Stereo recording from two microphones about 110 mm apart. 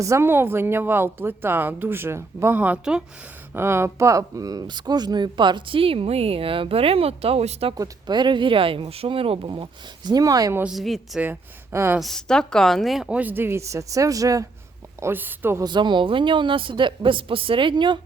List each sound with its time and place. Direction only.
0.0 s speech: 25° right (ahead or behind)
3.5 s speech: 25° right (ahead or behind); by 7.7 s 65° right (ahead or behind)
7.8 s speech: 40° right (ahead or behind)
10.7 s a woman's voice: centre (ahead or behind)
11.2 s speech: 20° right (ahead or behind)
11.9 s speech: 5° left (ahead or behind); by 14.4 s 30° right (ahead or behind)
15.0 s speech: 20° right (ahead or behind)
15.6 s speech: 45° right (ahead or behind)